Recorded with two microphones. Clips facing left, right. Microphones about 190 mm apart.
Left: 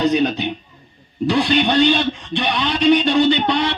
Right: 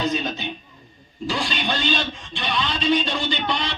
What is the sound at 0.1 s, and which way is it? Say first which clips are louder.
Speech: left 8 dB; 65° left (ahead or behind).